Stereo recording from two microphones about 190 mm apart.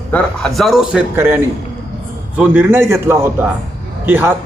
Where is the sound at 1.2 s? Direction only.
10° right (ahead or behind).